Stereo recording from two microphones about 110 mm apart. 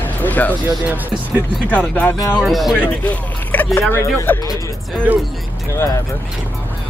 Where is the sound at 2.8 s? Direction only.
15° left (ahead or behind).